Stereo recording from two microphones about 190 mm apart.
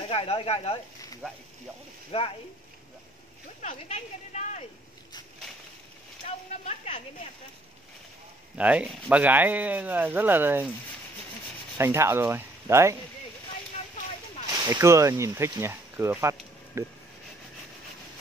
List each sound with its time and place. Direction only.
0.1 s speech: 30° left (ahead or behind)
2.0 s speech: 30° left (ahead or behind)
3.6 s speech: 40° left (ahead or behind)
6.2 s speech: 40° left (ahead or behind)
8.5 s speech: 5° right (ahead or behind)
11.8 s speech: 15° right (ahead or behind)
14.5 s speech: 20° right (ahead or behind)